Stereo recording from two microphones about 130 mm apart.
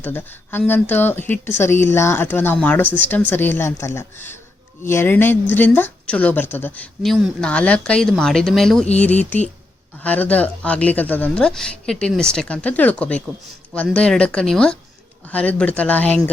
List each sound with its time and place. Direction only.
0.0 s a woman's voice: 15° left (ahead or behind)
7.0 s a woman's voice: centre (ahead or behind)